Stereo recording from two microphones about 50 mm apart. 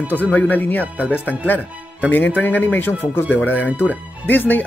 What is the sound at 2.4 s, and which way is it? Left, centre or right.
Speech, left.